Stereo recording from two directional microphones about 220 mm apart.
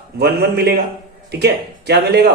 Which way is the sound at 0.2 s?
45° right (ahead or behind).